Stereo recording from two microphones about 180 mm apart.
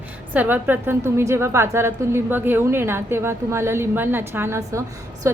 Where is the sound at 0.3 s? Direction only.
10° right (ahead or behind).